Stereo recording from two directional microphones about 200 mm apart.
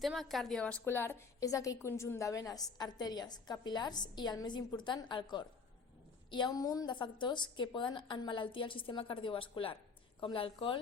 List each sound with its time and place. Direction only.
0.0 s a woman's voice: centre (ahead or behind); by 10.8 s 25° left (ahead or behind)